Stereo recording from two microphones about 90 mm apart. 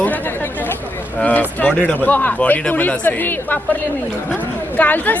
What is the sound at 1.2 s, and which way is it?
Speech, 20° left (ahead or behind).